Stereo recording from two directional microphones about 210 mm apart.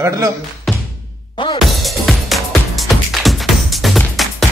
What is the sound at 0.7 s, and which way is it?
Music, centre (ahead or behind).